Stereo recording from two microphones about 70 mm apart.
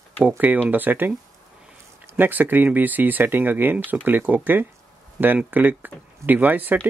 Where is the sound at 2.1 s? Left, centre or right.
Right.